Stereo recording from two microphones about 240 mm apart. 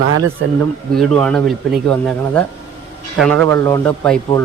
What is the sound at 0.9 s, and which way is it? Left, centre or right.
Speech, centre.